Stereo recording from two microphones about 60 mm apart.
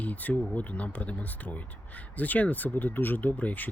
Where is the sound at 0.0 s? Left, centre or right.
Left.